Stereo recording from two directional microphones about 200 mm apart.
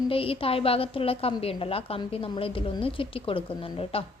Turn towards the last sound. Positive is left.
turn(degrees=30)  # may be behind; listen again after turning